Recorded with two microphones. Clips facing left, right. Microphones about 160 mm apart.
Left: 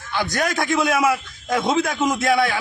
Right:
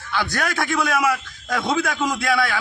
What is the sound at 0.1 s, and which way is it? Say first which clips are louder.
A man's voice: left 2 dB; 15° left (ahead or behind).